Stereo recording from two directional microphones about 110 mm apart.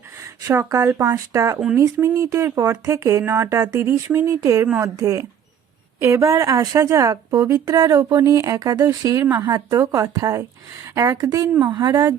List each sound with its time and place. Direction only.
0.4 s a woman's voice: 25° right (ahead or behind)